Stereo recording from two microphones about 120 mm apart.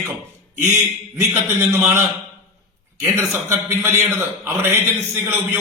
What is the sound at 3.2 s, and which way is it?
A man's voice, 20° right (ahead or behind).